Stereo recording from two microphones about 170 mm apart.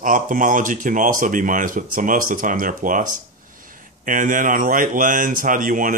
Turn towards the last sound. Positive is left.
turn(degrees=-50)  # may be behind; listen again after turning